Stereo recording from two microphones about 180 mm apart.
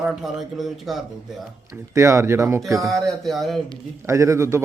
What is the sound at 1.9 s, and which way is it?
Speech, 15° right (ahead or behind).